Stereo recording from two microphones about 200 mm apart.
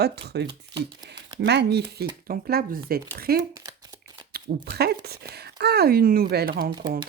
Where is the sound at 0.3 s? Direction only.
55° right (ahead or behind).